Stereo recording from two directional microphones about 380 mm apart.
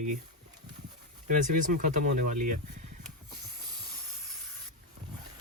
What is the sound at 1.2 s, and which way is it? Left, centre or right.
Speech, right.